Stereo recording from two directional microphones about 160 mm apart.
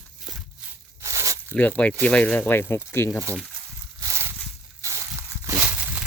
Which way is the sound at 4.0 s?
15° right (ahead or behind).